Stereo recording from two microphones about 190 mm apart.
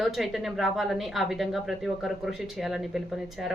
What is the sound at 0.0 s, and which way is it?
A woman's voice, centre (ahead or behind).